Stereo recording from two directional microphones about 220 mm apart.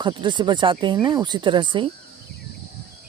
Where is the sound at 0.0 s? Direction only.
20° right (ahead or behind).